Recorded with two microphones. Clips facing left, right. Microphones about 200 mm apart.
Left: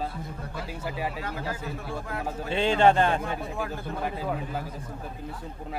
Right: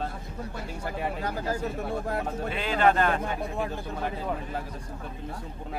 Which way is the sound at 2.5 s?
30° left (ahead or behind).